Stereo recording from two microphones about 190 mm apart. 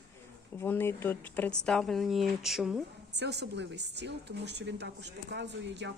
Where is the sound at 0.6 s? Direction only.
10° left (ahead or behind); by 2.8 s 5° right (ahead or behind).